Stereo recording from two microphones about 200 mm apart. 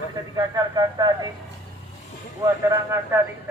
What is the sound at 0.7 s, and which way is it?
Speech, 20° right (ahead or behind).